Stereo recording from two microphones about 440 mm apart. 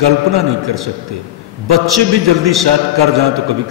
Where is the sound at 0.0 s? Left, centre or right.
Right.